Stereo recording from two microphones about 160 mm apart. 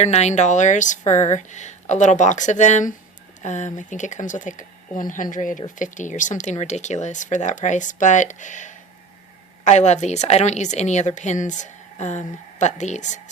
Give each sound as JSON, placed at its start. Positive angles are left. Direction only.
{"t": 0.0, "sound": "a woman's voice", "side_deg": 45}